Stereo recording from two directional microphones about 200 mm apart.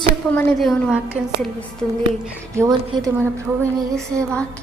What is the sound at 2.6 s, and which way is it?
Speech, 15° right (ahead or behind).